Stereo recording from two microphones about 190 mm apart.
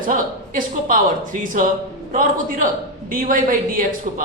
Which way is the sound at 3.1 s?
45° right (ahead or behind).